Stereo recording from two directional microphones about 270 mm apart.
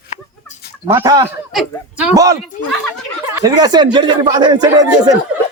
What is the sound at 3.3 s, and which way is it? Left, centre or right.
A man's voice, centre.